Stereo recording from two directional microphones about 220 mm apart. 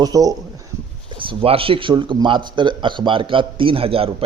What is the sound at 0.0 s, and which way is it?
Speech, 15° right (ahead or behind).